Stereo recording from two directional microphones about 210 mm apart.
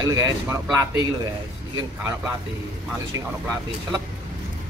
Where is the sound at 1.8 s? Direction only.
10° right (ahead or behind).